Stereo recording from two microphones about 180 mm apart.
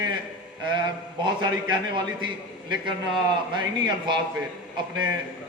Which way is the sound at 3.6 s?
25° right (ahead or behind).